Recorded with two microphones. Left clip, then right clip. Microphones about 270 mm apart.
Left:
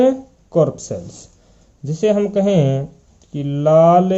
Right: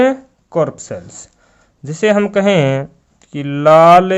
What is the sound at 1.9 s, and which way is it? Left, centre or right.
Speech, right.